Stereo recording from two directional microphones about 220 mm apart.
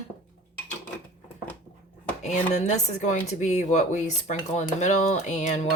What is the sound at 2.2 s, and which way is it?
Speech, 30° left (ahead or behind).